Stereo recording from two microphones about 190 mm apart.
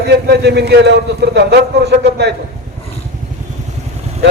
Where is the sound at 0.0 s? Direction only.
60° right (ahead or behind).